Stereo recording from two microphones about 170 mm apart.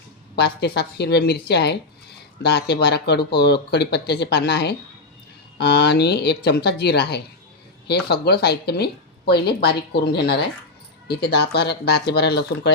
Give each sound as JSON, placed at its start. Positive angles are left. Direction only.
{"t": 0.3, "sound": "a woman's voice", "side_deg": 75}